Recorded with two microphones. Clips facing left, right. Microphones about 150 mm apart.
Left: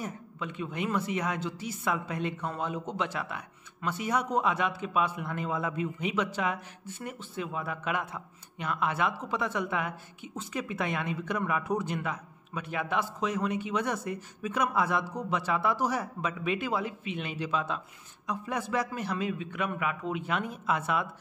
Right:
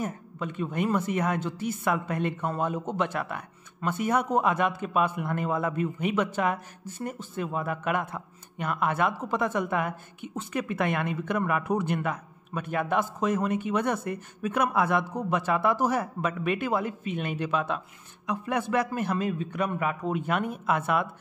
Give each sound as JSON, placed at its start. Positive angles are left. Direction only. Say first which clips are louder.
{"t": 0.0, "sound": "a man's voice", "louder": "right 5 dB", "side_deg": -45}